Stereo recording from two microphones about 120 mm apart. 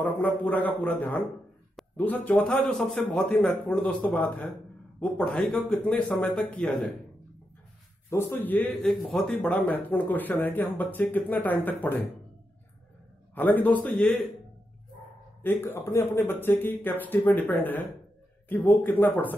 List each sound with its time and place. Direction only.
0.0 s speech: 15° left (ahead or behind)
8.1 s speech: 20° left (ahead or behind)
8.8 s speech: centre (ahead or behind)
13.3 s speech: 15° left (ahead or behind)
15.4 s speech: 20° left (ahead or behind)